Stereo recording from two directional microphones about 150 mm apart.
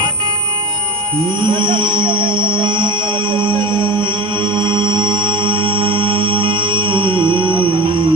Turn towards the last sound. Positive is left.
turn(degrees=-35)  # may be behind; listen again after turning